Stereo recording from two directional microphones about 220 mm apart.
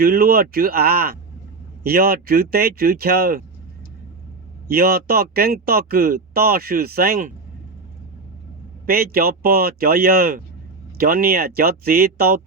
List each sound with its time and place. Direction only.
0.0 s speech: 45° right (ahead or behind)
4.7 s speech: 45° right (ahead or behind)
8.9 s speech: 45° right (ahead or behind)